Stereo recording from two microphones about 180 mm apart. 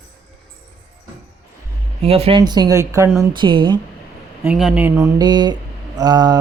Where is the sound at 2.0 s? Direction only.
35° right (ahead or behind).